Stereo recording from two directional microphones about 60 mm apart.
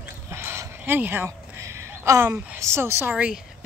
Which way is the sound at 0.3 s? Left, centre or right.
Right.